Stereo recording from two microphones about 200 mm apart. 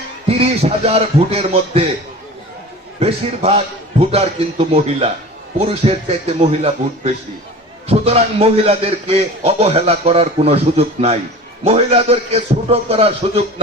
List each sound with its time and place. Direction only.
0.3 s a man's voice: 30° right (ahead or behind)
3.0 s a man's voice: 30° right (ahead or behind)